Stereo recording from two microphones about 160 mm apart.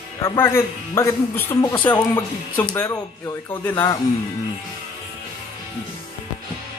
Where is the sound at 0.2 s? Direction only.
15° left (ahead or behind).